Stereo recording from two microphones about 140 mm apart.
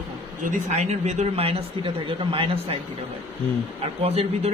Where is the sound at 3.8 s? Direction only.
45° right (ahead or behind).